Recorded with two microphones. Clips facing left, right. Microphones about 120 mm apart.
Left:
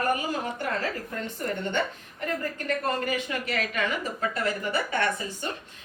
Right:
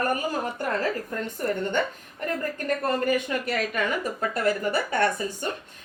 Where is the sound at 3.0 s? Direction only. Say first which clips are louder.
Right 5 dB; 45° right (ahead or behind).